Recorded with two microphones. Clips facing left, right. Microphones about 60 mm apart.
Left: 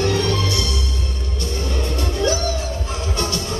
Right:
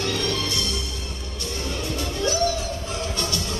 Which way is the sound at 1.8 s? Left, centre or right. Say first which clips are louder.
Left 5 dB; left.